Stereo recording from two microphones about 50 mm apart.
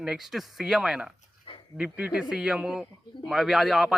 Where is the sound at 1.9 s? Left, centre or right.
Right.